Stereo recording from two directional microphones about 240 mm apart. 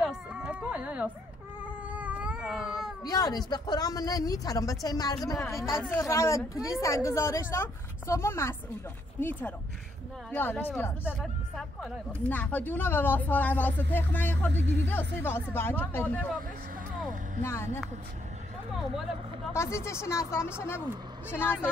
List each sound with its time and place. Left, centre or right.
0.0 s a sound: centre
1.9 s cat: centre
3.0 s a woman's voice: centre
14.5 s speech: right
14.9 s a woman's voice: centre
19.5 s a woman's voice: centre